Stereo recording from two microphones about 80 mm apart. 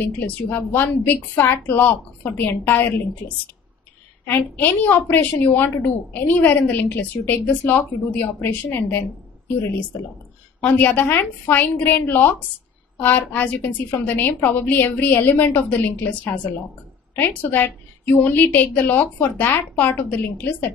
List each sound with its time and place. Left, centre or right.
0.0 s a woman's voice: left
4.3 s a woman's voice: left
10.6 s a woman's voice: left